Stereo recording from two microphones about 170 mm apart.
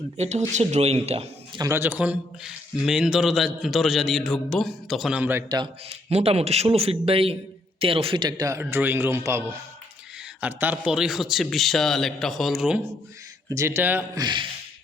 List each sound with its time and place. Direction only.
0.2 s a man's voice: 40° right (ahead or behind)
1.5 s speech: 15° right (ahead or behind)
6.1 s a man's voice: 35° right (ahead or behind); by 12.8 s 5° right (ahead or behind)
13.5 s a man's voice: 15° right (ahead or behind)
14.2 s speech: 25° right (ahead or behind)